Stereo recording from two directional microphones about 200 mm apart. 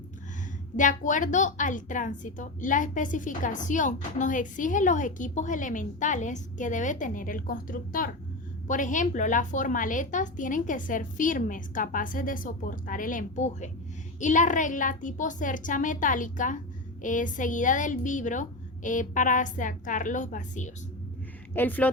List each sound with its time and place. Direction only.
0.8 s a woman's voice: 40° left (ahead or behind)
21.5 s speech: 10° left (ahead or behind)